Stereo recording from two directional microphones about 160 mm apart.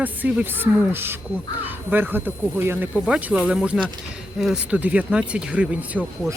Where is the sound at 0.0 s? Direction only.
10° right (ahead or behind).